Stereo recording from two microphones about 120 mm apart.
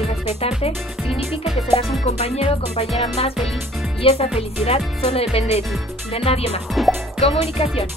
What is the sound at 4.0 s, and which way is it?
Speech, 55° left (ahead or behind).